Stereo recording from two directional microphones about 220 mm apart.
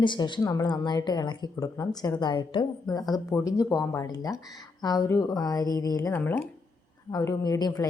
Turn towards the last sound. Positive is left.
turn(degrees=15)  # may be behind; listen again after turning